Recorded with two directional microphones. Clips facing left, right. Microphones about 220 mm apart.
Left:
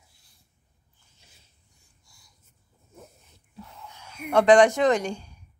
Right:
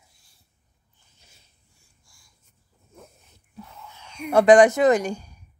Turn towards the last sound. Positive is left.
turn(degrees=-5)  # may be behind; listen again after turning